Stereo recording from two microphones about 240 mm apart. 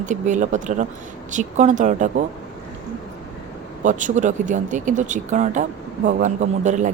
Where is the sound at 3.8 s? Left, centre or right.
Right.